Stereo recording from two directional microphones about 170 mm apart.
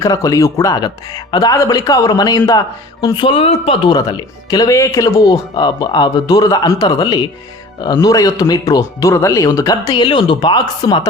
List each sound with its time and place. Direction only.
0.0 s speech: 20° left (ahead or behind); by 3.8 s 35° left (ahead or behind)
3.8 s speech: 25° left (ahead or behind)